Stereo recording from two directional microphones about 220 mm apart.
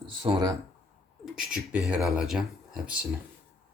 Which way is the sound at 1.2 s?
Centre (ahead or behind).